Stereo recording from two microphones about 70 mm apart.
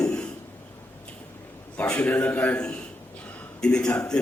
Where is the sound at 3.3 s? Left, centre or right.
Left.